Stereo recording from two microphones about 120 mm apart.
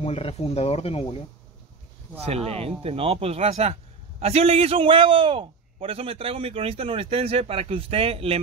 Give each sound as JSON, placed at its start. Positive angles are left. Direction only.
{"t": 0.0, "sound": "speech", "side_deg": 55}
{"t": 2.2, "sound": "a man's voice", "side_deg": -60}